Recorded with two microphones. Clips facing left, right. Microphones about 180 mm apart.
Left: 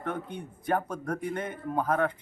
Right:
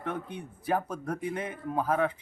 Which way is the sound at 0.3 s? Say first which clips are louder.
Left 1 dB; 5° right (ahead or behind).